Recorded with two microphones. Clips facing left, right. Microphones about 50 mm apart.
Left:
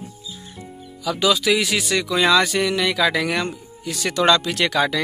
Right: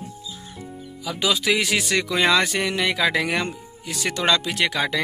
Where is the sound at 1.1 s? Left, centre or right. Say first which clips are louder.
Left 3 dB; right.